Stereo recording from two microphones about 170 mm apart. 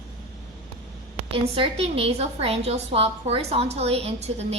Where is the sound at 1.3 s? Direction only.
35° right (ahead or behind).